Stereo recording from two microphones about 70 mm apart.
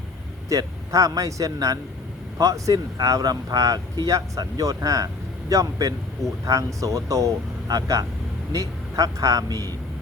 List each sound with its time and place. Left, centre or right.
0.4 s speech: right